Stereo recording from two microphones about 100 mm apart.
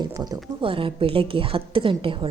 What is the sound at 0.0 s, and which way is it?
Speech, 40° right (ahead or behind).